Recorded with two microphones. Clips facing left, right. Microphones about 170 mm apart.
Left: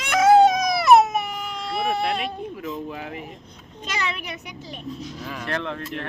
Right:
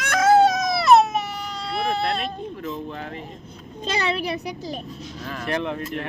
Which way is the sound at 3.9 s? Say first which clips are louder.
Right 6 dB; 30° right (ahead or behind).